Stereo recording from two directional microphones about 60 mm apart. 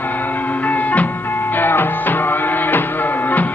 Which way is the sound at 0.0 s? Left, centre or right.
Left.